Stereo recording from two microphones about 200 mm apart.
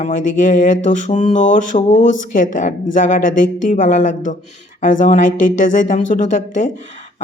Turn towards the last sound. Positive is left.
turn(degrees=40)  # may be behind; listen again after turning